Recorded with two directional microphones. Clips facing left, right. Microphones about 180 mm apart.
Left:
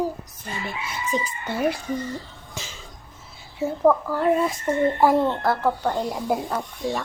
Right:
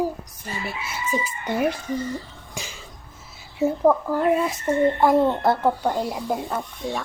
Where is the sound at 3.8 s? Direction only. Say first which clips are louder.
Left 1 dB; 15° right (ahead or behind).